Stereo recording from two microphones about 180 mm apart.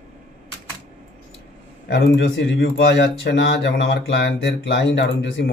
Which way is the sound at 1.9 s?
75° left (ahead or behind).